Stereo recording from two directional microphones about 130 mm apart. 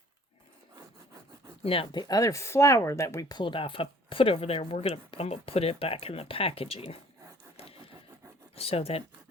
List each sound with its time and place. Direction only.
1.6 s speech: 45° left (ahead or behind)
8.5 s speech: 50° left (ahead or behind)